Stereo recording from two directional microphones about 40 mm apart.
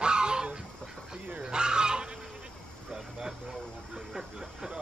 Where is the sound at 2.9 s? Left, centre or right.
Centre.